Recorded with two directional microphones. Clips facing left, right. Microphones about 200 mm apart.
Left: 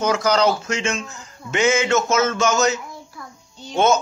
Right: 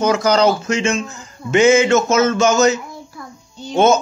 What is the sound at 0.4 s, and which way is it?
A man's voice, centre (ahead or behind).